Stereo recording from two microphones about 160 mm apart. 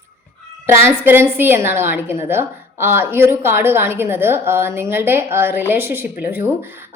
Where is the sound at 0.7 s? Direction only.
15° right (ahead or behind).